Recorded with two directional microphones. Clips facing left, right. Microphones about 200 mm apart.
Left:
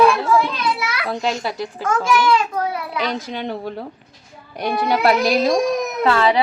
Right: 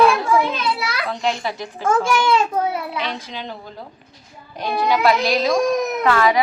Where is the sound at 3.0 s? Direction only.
50° left (ahead or behind).